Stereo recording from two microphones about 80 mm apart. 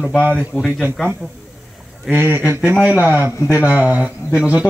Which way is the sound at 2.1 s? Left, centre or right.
Right.